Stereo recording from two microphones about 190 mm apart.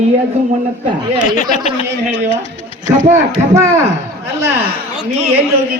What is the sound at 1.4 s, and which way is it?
Speech, 35° left (ahead or behind).